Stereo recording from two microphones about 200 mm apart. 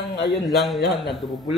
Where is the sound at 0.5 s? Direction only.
Centre (ahead or behind).